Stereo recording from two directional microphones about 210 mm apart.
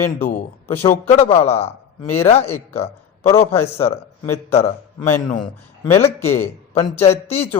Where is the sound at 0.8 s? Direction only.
30° left (ahead or behind).